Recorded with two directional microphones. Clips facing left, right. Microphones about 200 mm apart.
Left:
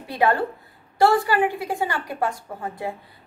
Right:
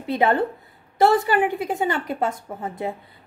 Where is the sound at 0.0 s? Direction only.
20° right (ahead or behind).